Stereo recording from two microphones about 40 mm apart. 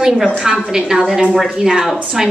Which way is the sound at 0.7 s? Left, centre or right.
Centre.